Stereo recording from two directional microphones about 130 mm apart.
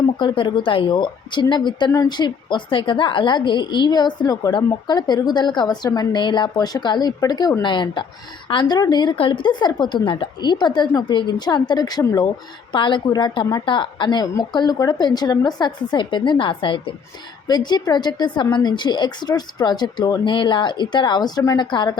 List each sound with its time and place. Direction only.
0.0 s a woman's voice: 35° left (ahead or behind)